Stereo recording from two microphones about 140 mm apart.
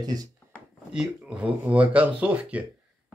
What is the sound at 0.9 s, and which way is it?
Speech, 5° right (ahead or behind).